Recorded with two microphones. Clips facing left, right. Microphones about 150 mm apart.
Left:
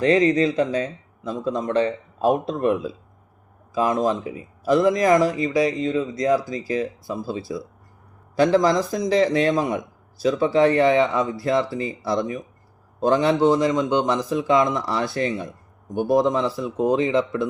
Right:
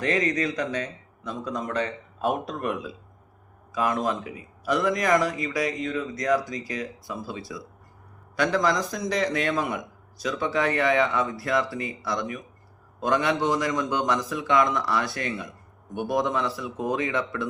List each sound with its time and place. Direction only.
0.0 s speech: 30° left (ahead or behind)